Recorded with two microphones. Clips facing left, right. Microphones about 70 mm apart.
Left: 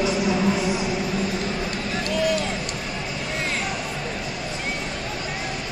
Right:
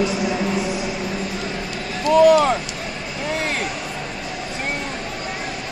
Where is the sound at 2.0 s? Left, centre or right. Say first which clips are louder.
Right 12 dB; right.